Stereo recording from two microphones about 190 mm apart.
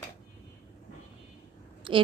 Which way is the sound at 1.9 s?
25° right (ahead or behind).